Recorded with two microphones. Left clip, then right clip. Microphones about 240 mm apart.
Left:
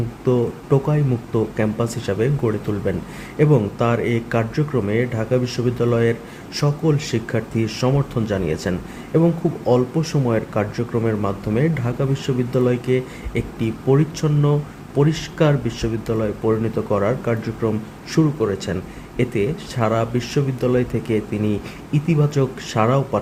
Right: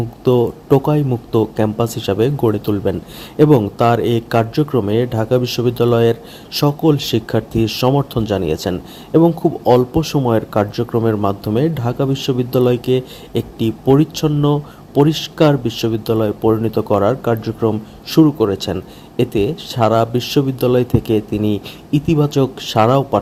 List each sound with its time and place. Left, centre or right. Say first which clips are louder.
0.3 s speech: right 6 dB; right